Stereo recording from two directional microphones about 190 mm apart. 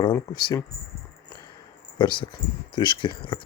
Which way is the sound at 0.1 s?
20° left (ahead or behind).